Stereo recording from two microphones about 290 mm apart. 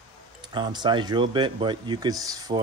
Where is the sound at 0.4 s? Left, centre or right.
Centre.